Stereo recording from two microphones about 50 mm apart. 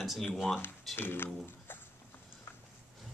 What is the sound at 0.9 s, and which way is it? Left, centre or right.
Speech, left.